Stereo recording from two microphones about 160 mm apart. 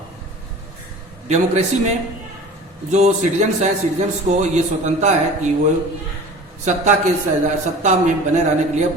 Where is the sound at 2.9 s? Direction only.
45° right (ahead or behind).